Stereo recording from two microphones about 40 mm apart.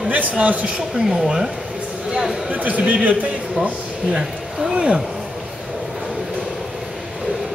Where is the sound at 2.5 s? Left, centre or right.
Right.